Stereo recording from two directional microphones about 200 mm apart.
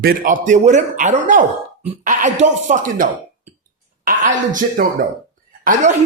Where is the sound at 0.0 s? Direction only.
45° right (ahead or behind).